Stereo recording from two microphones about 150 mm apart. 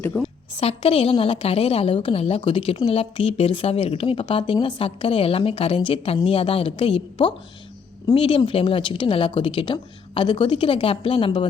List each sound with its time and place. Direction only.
0.0 s a woman's voice: 10° left (ahead or behind)
0.5 s a woman's voice: 40° left (ahead or behind)